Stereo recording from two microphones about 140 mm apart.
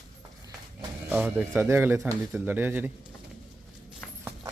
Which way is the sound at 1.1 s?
10° right (ahead or behind).